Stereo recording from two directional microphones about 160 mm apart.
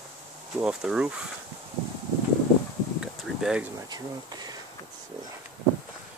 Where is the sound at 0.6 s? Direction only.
5° right (ahead or behind).